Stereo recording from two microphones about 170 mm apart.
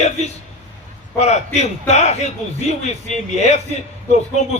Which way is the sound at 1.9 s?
40° left (ahead or behind).